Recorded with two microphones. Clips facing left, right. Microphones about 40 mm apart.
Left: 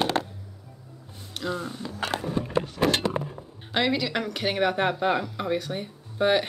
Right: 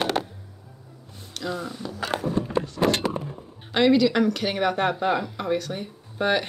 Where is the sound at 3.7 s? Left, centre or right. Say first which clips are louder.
Right 6 dB; centre.